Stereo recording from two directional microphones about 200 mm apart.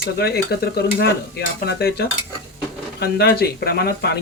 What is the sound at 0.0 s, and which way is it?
Stir, 50° left (ahead or behind).